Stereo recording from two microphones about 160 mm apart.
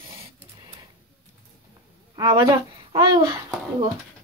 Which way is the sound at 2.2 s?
25° right (ahead or behind).